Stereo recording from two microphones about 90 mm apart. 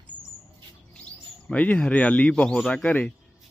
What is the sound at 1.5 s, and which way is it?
Speech, 15° left (ahead or behind).